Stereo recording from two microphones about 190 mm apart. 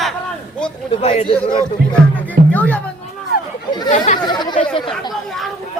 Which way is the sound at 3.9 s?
40° left (ahead or behind).